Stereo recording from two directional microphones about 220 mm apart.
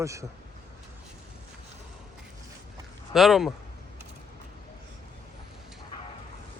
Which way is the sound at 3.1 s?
Centre (ahead or behind).